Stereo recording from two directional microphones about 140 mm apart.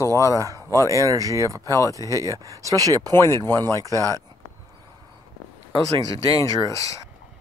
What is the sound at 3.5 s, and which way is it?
Speech, 20° left (ahead or behind).